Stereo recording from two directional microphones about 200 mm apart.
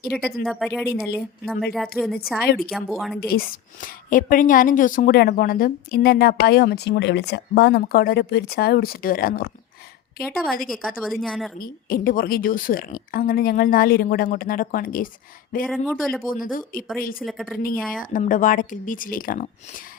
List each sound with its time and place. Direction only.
0.1 s speech: 5° left (ahead or behind)
3.2 s a woman's voice: 50° left (ahead or behind)
10.7 s speech: centre (ahead or behind)
11.6 s a woman's voice: 45° left (ahead or behind)
15.6 s speech: centre (ahead or behind)
16.3 s a woman's voice: 45° left (ahead or behind)
17.2 s speech: centre (ahead or behind)
18.1 s speech: 40° left (ahead or behind)